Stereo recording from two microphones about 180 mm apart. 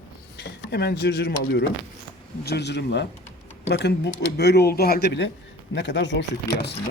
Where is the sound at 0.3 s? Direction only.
65° left (ahead or behind).